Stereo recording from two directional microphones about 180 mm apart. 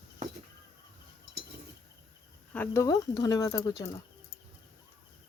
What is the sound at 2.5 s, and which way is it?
Speech, 10° left (ahead or behind).